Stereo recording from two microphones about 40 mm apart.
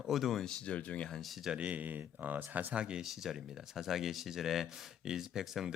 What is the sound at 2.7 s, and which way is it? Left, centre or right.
Speech, right.